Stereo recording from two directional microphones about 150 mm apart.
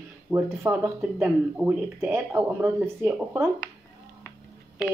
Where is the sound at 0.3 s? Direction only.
15° right (ahead or behind).